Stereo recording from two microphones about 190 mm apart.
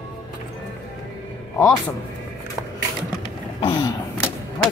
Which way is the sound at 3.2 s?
25° left (ahead or behind).